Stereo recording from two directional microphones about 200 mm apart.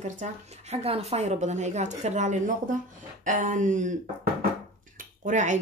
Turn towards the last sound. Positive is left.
turn(degrees=-40)  # may be behind; listen again after turning